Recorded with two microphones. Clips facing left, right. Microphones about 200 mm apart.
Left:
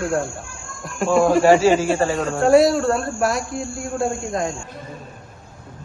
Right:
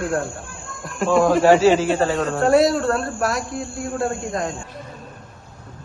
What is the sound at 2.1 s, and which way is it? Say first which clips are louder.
Speech: left 3 dB; centre (ahead or behind).